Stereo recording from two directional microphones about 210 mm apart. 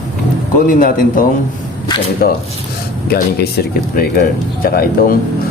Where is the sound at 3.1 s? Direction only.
45° left (ahead or behind).